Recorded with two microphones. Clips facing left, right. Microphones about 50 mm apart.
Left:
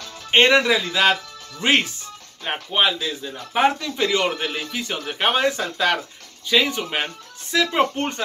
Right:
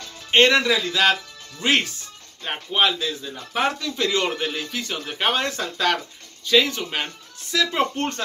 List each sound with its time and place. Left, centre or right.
0.3 s speech: centre